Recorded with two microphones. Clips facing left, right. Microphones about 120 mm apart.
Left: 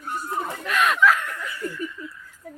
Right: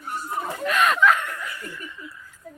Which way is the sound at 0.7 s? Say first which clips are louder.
Right 1 dB; centre (ahead or behind).